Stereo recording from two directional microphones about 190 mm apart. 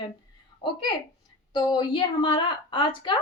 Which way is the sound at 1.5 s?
25° left (ahead or behind).